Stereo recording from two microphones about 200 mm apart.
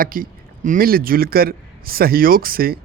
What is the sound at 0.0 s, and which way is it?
A man's voice, 45° right (ahead or behind).